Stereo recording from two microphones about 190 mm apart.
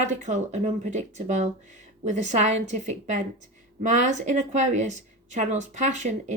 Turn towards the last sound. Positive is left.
turn(degrees=-40)  # may be behind; listen again after turning